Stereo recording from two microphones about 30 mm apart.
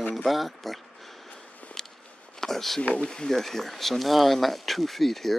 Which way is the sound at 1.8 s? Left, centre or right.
Centre.